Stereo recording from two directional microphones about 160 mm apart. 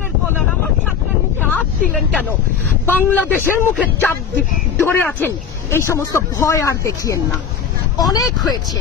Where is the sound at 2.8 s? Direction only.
10° left (ahead or behind).